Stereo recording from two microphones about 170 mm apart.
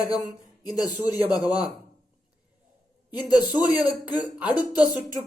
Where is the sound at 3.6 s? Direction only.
10° right (ahead or behind).